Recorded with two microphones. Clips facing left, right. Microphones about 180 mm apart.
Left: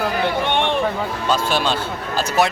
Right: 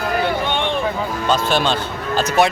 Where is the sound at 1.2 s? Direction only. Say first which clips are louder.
Right 2 dB; 5° left (ahead or behind).